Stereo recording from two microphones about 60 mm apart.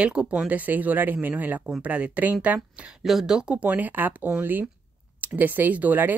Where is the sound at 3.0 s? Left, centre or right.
Centre.